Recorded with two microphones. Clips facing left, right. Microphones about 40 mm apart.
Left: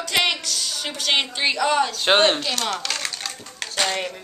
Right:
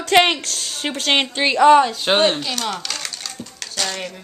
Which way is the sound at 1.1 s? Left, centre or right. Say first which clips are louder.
Right 3 dB; right.